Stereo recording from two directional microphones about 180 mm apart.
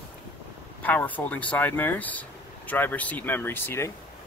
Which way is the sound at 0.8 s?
10° left (ahead or behind).